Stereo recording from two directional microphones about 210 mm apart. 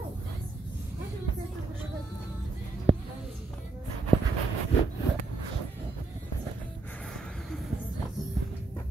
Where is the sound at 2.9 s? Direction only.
25° right (ahead or behind).